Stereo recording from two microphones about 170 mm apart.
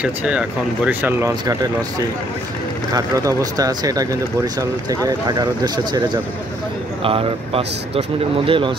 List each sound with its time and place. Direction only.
0.0 s speech: 5° right (ahead or behind)
1.4 s speech: 25° right (ahead or behind)